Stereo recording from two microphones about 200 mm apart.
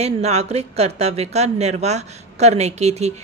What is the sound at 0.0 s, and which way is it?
A woman's voice, 30° right (ahead or behind).